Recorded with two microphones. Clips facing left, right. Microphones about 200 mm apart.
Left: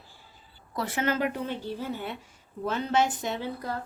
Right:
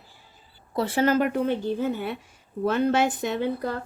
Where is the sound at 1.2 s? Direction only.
50° right (ahead or behind).